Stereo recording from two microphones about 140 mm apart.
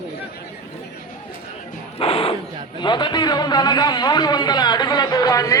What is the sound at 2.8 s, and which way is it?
A man's voice, 30° left (ahead or behind).